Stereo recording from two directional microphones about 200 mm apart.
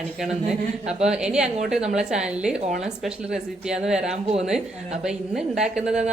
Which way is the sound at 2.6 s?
35° right (ahead or behind).